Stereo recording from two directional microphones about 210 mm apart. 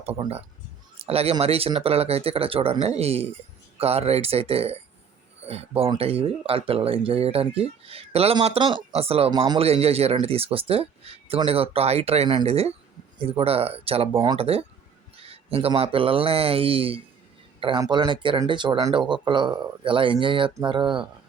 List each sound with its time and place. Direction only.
0.0 s speech: 30° right (ahead or behind)